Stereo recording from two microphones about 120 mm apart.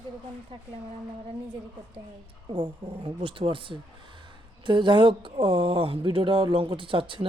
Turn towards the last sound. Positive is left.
turn(degrees=-45)  # may be behind; listen again after turning